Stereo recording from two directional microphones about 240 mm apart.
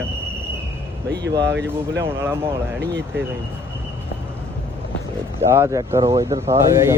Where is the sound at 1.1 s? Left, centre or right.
Right.